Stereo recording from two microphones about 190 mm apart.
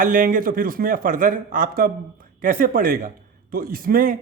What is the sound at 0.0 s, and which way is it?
A man's voice, 45° right (ahead or behind).